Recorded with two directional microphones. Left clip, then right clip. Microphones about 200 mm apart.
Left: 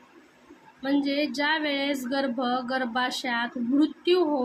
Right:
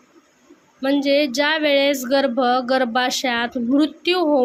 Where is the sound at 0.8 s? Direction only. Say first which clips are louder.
Right 9 dB; 45° right (ahead or behind).